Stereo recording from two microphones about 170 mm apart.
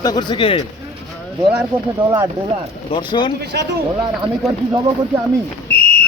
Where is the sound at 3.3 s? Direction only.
80° right.